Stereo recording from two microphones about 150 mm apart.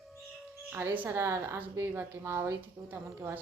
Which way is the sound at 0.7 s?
15° right (ahead or behind).